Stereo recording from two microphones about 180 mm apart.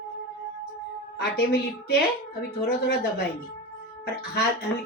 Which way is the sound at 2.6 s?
65° left (ahead or behind).